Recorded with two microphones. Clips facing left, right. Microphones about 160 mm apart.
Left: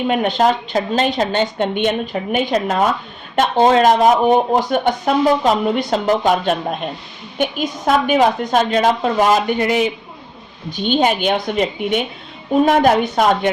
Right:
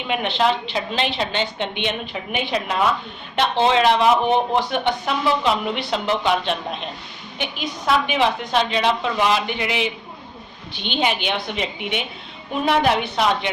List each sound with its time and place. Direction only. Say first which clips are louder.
0.1 s speech: left 3 dB; 45° left (ahead or behind)